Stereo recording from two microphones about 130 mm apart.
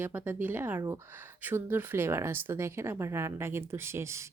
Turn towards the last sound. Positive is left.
turn(degrees=-20)  # may be behind; listen again after turning